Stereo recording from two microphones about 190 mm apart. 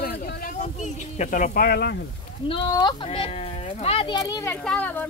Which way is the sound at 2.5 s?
25° left (ahead or behind).